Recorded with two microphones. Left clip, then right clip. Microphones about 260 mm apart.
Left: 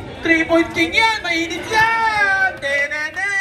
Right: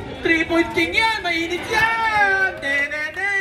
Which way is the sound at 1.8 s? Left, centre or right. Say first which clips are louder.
Left 2 dB; left.